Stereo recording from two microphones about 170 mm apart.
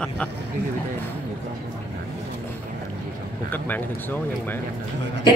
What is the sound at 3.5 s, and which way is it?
Speech, 10° left (ahead or behind).